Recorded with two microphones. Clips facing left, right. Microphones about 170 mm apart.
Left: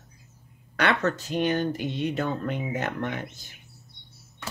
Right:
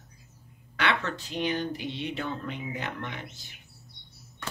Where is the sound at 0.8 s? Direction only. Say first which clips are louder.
Left 5 dB; 45° left (ahead or behind).